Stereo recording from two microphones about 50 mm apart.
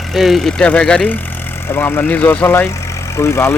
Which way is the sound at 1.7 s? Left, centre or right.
Left.